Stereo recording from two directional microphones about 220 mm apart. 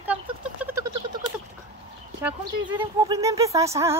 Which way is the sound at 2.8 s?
15° right (ahead or behind).